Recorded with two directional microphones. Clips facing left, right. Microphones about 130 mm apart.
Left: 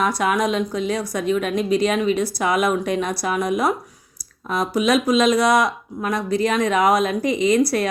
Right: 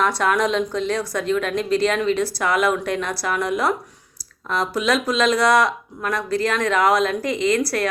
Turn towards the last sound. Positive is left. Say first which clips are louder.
# left 2 dB
turn(degrees=20)  # may be behind; listen again after turning